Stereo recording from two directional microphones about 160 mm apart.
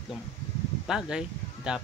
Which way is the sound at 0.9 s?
5° right (ahead or behind).